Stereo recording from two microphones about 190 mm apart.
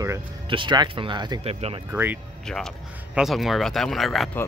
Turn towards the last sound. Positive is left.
turn(degrees=0)  # may be behind; listen again after turning